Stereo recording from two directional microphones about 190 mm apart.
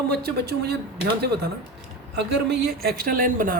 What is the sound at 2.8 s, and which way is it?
Speech, 50° right (ahead or behind).